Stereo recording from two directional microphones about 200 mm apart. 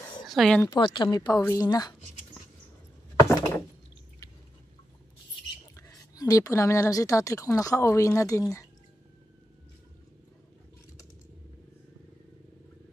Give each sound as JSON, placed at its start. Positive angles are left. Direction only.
{"t": 0.3, "sound": "speech", "side_deg": 0}
{"t": 0.7, "sound": "speech", "side_deg": 25}
{"t": 3.2, "sound": "wood", "side_deg": 15}
{"t": 5.8, "sound": "a woman's voice", "side_deg": 15}